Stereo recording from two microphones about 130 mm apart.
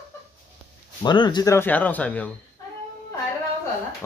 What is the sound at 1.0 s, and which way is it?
Speech, 35° left (ahead or behind).